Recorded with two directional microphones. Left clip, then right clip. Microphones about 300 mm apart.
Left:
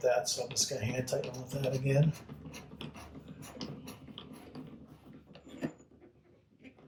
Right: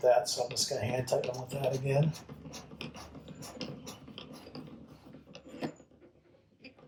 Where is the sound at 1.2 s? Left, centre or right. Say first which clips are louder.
Right 3 dB; centre.